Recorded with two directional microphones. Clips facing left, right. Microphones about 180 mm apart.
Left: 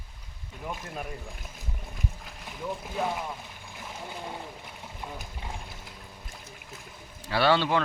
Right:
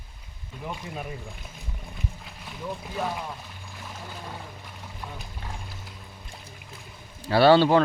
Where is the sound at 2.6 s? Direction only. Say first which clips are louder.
Even; centre (ahead or behind).